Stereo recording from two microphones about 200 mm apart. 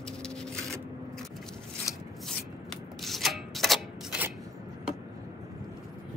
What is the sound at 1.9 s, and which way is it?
Rub, 15° left (ahead or behind).